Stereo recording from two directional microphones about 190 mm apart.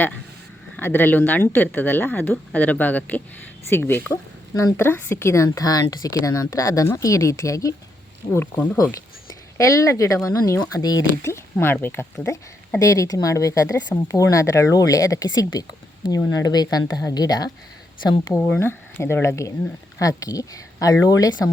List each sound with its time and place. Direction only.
0.8 s a woman's voice: 10° left (ahead or behind)
18.3 s speech: 5° left (ahead or behind)